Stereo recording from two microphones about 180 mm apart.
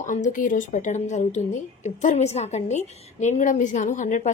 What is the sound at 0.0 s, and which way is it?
A woman's voice, 45° left (ahead or behind).